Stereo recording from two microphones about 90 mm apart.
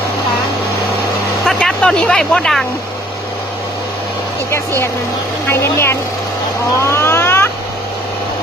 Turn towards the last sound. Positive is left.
turn(degrees=25)  # may be behind; listen again after turning